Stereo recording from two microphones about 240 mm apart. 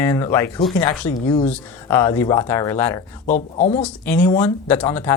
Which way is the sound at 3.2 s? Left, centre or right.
Left.